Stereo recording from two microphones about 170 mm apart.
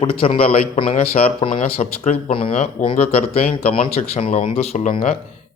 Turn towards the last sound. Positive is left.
turn(degrees=40)  # may be behind; listen again after turning